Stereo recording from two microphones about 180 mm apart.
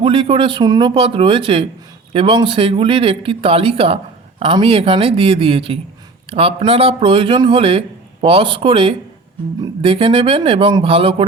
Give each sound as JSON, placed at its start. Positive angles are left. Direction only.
{"t": 0.0, "sound": "a man's voice", "side_deg": -30}